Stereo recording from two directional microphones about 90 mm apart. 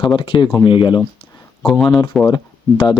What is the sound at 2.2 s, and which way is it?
Speech, 55° left (ahead or behind).